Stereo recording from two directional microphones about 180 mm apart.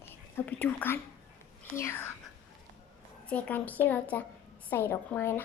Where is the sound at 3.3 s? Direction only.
10° left (ahead or behind).